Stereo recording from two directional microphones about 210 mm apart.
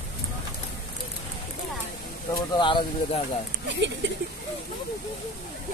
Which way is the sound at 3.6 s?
55° right (ahead or behind).